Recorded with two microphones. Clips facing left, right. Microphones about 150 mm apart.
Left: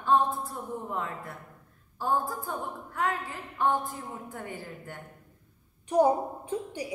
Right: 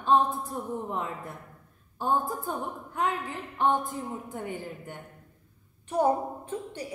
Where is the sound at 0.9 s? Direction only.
20° right (ahead or behind).